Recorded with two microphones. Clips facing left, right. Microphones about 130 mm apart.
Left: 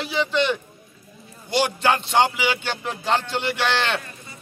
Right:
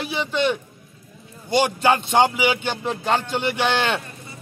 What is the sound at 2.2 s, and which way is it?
A man's voice, 15° right (ahead or behind).